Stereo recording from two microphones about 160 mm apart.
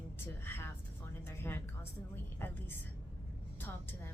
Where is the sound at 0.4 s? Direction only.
15° left (ahead or behind).